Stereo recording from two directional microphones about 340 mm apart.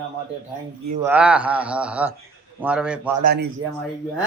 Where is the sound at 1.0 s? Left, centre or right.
Centre.